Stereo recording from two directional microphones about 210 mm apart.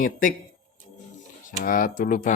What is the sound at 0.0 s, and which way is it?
Speech, 40° left (ahead or behind).